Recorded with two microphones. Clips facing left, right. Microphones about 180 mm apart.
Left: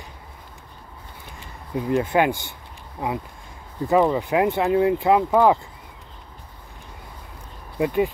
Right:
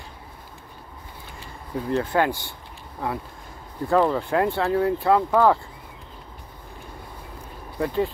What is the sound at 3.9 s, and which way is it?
Speech, 10° left (ahead or behind).